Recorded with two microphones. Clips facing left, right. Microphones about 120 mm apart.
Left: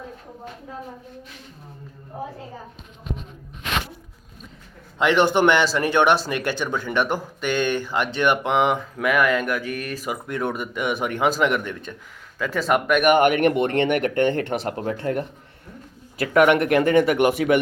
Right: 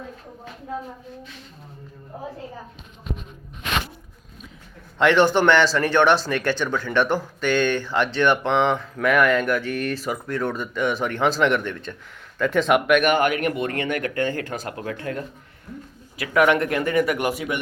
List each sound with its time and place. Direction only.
4.9 s speech: 10° left (ahead or behind)
13.0 s speech: 20° left (ahead or behind)
14.7 s speech: 35° left (ahead or behind)
16.1 s speech: 40° left (ahead or behind)
16.4 s speech: 25° left (ahead or behind)
17.3 s speech: 65° left (ahead or behind)